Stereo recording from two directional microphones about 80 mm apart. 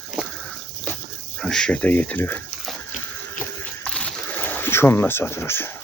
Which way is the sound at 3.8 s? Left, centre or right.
Centre.